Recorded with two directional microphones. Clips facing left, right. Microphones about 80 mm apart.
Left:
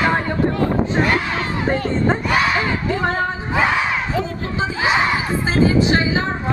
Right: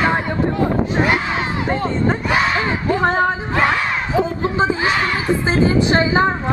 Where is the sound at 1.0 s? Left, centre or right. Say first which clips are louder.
Right 2 dB; centre.